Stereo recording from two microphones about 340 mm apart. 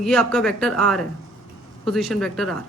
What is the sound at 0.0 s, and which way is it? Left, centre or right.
Speech, centre.